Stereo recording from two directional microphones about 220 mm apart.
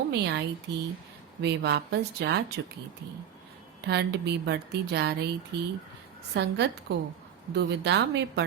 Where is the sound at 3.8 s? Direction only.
50° right (ahead or behind).